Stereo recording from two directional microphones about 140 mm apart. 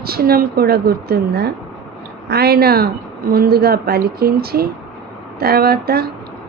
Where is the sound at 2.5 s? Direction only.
90° right.